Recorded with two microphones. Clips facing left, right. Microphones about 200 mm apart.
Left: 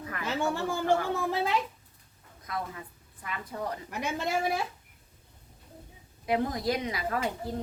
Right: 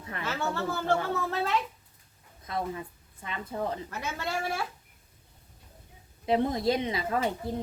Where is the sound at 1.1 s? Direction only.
15° left (ahead or behind).